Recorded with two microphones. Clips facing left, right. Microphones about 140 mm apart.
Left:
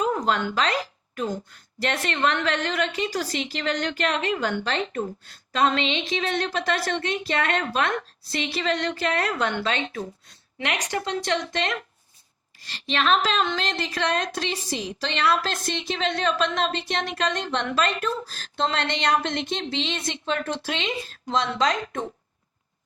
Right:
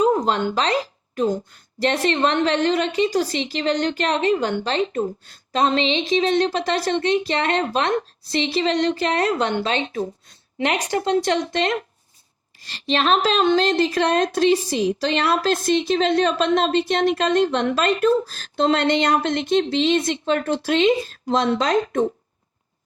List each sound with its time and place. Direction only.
0.0 s a woman's voice: 30° right (ahead or behind); by 21.6 s 45° right (ahead or behind)